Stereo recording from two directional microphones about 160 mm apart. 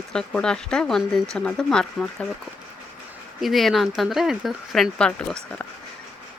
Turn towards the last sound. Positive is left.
turn(degrees=5)  # may be behind; listen again after turning